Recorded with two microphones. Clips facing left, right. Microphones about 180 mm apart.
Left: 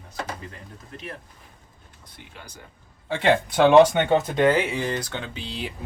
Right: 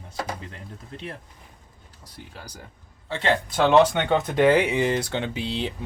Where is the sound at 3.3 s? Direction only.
10° left (ahead or behind).